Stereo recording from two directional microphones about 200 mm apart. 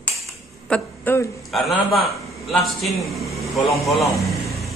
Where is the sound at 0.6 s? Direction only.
10° left (ahead or behind).